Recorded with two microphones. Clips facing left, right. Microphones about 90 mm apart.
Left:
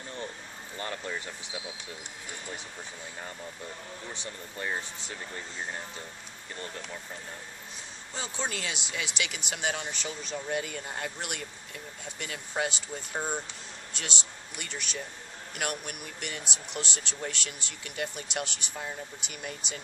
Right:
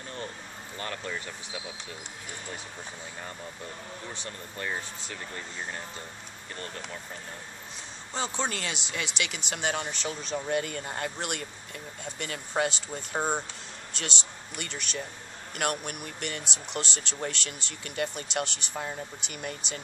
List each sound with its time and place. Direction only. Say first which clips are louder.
0.7 s speech: even; 15° left (ahead or behind)
4.1 s speech: right 1 dB; 15° left (ahead or behind)
8.2 s speech: right 4 dB; 5° left (ahead or behind)
13.1 s speech: right 4 dB; 35° right (ahead or behind)
14.6 s speech: right 2 dB; 10° left (ahead or behind)